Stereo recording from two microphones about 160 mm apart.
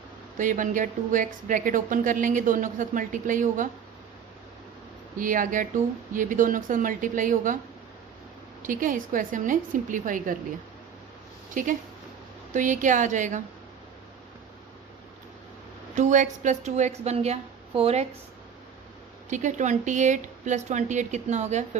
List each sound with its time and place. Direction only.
0.3 s a woman's voice: 55° right (ahead or behind)
5.1 s a woman's voice: 55° right (ahead or behind)
8.6 s a woman's voice: 55° right (ahead or behind)
11.5 s a woman's voice: 55° right (ahead or behind)
16.0 s speech: 50° right (ahead or behind)
19.3 s speech: 50° right (ahead or behind)